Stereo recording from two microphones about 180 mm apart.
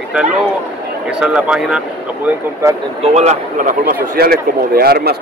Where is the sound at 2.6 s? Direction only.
15° right (ahead or behind).